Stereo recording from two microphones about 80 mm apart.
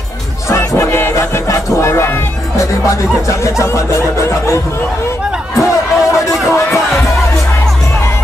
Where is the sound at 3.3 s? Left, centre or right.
Left.